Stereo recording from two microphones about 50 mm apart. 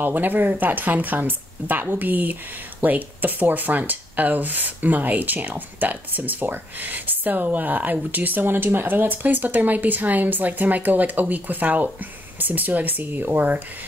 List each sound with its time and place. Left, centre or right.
0.0 s speech: right